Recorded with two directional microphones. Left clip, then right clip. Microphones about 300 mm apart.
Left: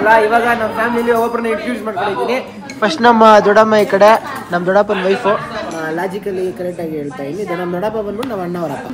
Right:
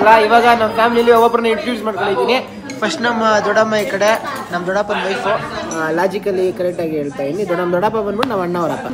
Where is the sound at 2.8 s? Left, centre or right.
Centre.